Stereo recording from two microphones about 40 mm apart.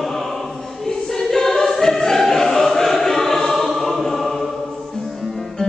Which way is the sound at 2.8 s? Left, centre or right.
Centre.